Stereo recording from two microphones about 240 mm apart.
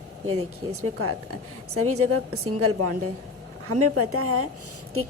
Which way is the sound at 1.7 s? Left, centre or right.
Right.